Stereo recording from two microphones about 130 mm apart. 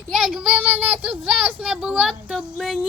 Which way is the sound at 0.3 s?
5° right (ahead or behind).